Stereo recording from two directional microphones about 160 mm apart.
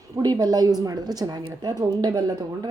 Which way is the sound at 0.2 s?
25° right (ahead or behind).